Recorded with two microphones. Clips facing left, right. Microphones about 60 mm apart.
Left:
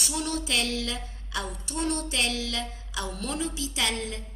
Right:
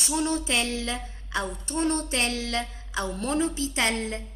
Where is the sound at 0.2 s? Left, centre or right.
Right.